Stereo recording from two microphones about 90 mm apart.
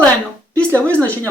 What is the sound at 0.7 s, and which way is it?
Speech, 15° left (ahead or behind).